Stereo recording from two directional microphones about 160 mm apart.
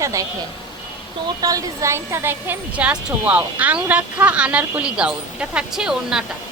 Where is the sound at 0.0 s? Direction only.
20° right (ahead or behind).